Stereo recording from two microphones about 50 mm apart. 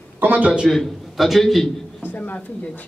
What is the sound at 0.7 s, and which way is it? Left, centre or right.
A man's voice, centre.